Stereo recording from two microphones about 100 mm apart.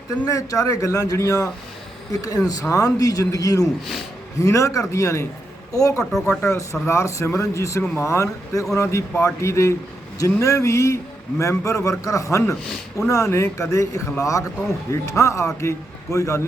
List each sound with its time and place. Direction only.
0.3 s a man's voice: 35° left (ahead or behind)
6.0 s speech: 5° left (ahead or behind)
6.8 s a man's voice: 30° left (ahead or behind)